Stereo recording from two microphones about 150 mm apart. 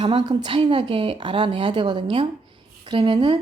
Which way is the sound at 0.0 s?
30° right (ahead or behind).